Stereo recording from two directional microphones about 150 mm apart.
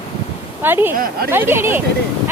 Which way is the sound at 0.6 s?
15° right (ahead or behind).